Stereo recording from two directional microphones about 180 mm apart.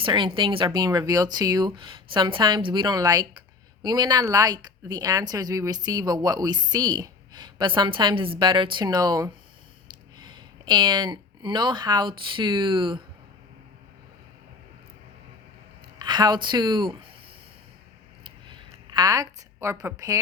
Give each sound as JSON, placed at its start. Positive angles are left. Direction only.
{"t": 0.0, "sound": "speech", "side_deg": -25}
{"t": 16.0, "sound": "speech", "side_deg": -25}
{"t": 18.9, "sound": "a woman's voice", "side_deg": -20}